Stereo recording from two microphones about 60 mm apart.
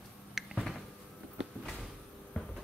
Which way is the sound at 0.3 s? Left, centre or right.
Centre.